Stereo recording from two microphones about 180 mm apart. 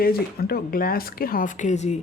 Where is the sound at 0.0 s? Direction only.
55° left (ahead or behind).